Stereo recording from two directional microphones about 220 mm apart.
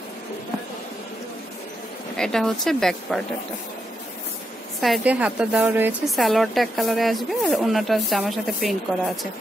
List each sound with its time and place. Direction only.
2.1 s a woman's voice: centre (ahead or behind)
4.8 s a woman's voice: 5° right (ahead or behind)